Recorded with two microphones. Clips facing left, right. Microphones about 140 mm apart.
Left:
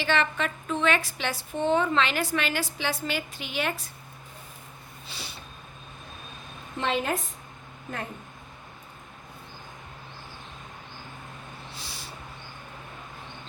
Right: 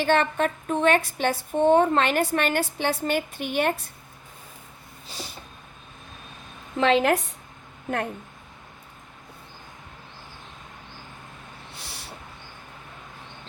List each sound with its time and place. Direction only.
0.0 s a woman's voice: 50° right (ahead or behind)
5.1 s snort: 40° right (ahead or behind)
6.7 s a woman's voice: 90° right